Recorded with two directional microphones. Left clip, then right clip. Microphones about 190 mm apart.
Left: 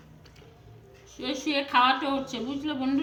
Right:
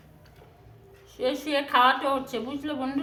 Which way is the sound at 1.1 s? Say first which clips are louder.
Right 3 dB; 35° right (ahead or behind).